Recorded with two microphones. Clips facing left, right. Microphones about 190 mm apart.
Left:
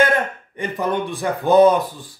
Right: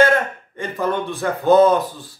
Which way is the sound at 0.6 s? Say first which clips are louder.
Even; 15° left (ahead or behind).